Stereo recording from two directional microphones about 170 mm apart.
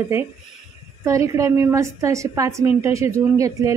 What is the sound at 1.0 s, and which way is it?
A woman's voice, 20° right (ahead or behind).